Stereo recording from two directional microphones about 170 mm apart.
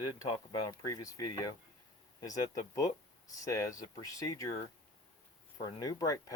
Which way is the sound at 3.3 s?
20° left (ahead or behind).